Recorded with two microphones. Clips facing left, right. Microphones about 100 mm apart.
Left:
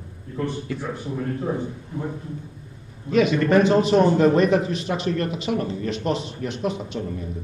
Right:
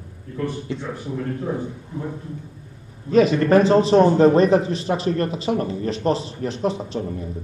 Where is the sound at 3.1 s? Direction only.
35° right (ahead or behind).